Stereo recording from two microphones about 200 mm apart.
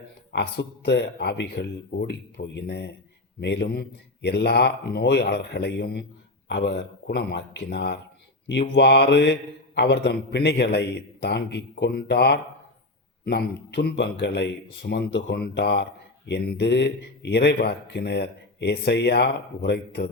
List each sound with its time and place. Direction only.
0.3 s speech: 55° left (ahead or behind)